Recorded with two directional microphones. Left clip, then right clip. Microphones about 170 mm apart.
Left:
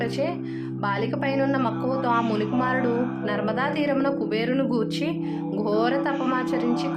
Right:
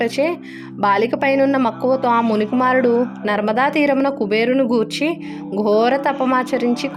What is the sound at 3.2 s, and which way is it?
Speech, 55° right (ahead or behind).